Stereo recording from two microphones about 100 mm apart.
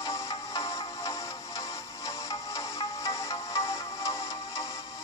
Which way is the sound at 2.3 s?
45° left (ahead or behind).